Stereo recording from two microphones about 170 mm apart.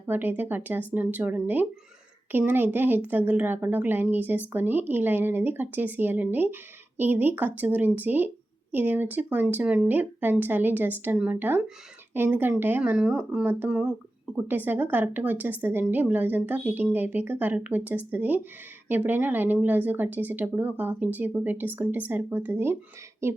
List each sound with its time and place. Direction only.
0.1 s speech: 10° right (ahead or behind)